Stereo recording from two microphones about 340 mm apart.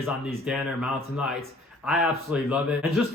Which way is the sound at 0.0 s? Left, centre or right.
Centre.